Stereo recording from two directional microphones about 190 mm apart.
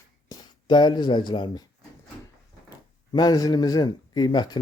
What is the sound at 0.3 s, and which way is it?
Speech, 25° left (ahead or behind).